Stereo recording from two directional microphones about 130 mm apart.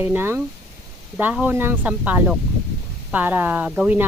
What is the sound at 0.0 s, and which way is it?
Speech, 15° right (ahead or behind).